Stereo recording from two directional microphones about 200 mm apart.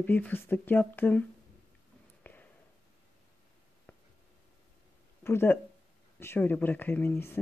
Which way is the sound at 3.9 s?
10° left (ahead or behind).